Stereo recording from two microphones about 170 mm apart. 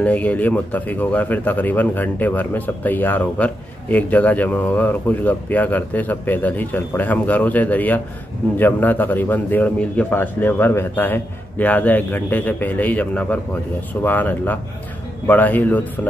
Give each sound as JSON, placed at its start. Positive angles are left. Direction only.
{"t": 0.0, "sound": "speech", "side_deg": 10}